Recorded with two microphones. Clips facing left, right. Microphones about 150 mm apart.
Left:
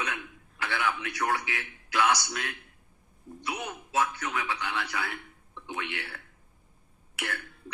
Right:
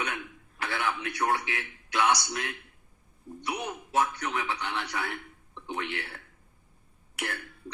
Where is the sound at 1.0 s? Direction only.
30° right (ahead or behind).